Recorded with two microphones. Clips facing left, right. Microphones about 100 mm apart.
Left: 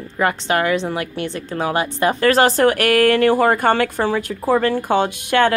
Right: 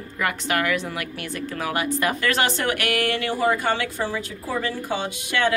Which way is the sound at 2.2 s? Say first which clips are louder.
Left 9 dB; 40° left (ahead or behind).